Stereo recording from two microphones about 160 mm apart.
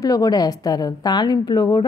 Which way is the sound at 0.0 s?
25° left (ahead or behind).